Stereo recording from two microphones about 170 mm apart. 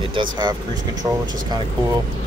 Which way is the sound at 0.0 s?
30° right (ahead or behind).